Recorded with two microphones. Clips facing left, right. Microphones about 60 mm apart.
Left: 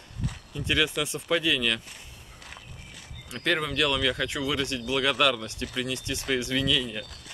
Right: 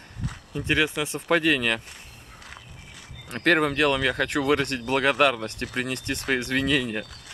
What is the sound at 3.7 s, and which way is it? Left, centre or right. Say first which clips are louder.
Speech: right 3 dB; right.